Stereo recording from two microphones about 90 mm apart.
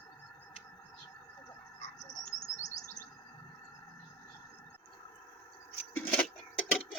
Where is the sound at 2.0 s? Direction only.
45° left (ahead or behind).